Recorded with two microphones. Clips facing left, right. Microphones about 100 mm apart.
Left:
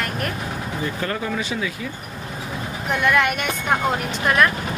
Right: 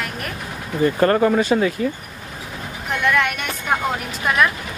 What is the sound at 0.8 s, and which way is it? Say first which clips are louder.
Speech: right 12 dB; 50° right (ahead or behind).